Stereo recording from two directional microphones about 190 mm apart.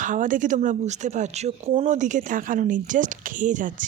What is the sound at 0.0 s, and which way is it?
A woman's voice, 45° right (ahead or behind).